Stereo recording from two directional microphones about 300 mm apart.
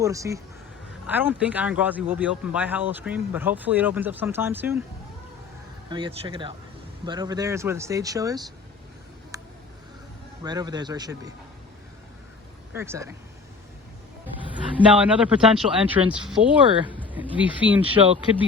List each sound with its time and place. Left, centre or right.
0.0 s speech: centre
5.9 s speech: centre
9.3 s a sound: centre
10.4 s speech: centre
12.7 s speech: centre
15.0 s speech: centre